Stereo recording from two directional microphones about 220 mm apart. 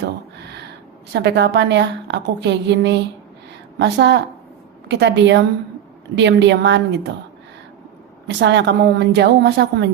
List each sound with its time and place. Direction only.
0.0 s a sound: 50° right (ahead or behind)
1.1 s a woman's voice: 50° right (ahead or behind)
8.3 s a woman's voice: 50° right (ahead or behind)